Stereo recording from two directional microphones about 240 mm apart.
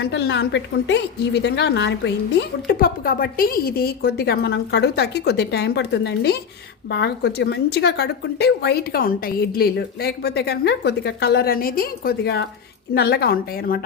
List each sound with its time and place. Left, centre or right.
0.0 s a woman's voice: left